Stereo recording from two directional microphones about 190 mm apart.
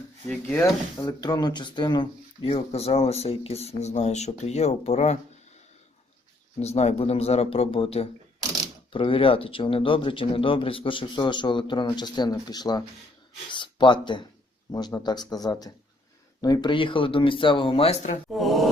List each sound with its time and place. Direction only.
0.3 s speech: 5° left (ahead or behind)
0.6 s speech: 15° left (ahead or behind); by 5.2 s 35° left (ahead or behind)
6.6 s speech: 35° left (ahead or behind)
18.3 s a sound: centre (ahead or behind)